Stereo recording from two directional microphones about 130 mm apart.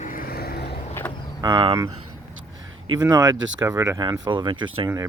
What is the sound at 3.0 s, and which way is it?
Speech, 30° right (ahead or behind).